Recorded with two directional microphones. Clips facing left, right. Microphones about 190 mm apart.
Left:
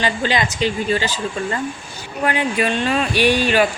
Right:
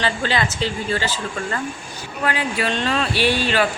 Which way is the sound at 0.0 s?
15° left (ahead or behind).